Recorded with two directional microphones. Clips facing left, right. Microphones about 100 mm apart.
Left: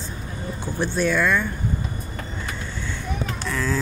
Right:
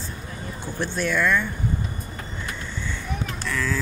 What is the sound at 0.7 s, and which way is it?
Speech, 15° left (ahead or behind).